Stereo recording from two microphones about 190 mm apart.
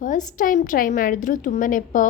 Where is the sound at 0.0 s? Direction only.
40° left (ahead or behind).